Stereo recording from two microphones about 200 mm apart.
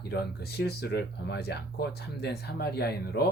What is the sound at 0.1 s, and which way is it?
Speech, 55° left (ahead or behind).